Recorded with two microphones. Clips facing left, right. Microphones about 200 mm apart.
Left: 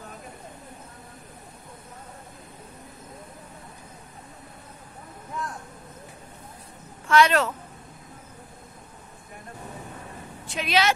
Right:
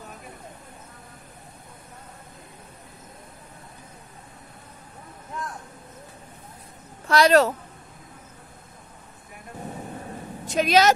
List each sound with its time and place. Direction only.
7.1 s a woman's voice: 35° right (ahead or behind)
10.4 s speech: 40° right (ahead or behind)